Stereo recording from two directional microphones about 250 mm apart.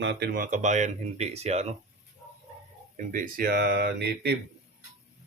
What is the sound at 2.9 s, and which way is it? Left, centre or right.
Speech, right.